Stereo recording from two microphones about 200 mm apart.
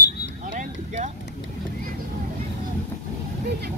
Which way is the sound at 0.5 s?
35° right (ahead or behind).